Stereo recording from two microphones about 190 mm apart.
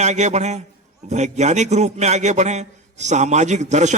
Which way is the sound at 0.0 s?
35° right (ahead or behind).